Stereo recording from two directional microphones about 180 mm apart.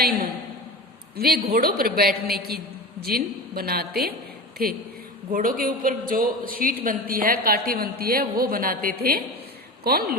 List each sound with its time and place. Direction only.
1.1 s a man's voice: 60° right (ahead or behind)